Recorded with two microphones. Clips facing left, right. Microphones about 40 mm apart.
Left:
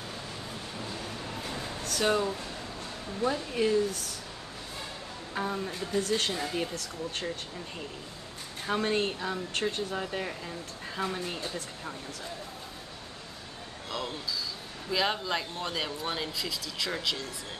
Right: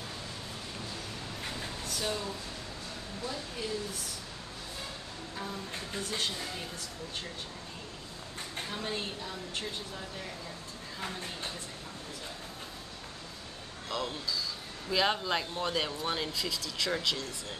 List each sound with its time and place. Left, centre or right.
1.8 s a sound: left
3.3 s speech: left
5.3 s speech: left
8.7 s speech: left
13.8 s speech: centre